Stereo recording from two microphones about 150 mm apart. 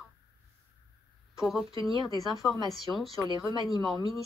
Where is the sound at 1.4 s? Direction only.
Centre (ahead or behind).